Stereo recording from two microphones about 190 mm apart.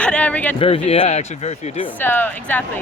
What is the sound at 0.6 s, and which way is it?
Speech, 30° left (ahead or behind).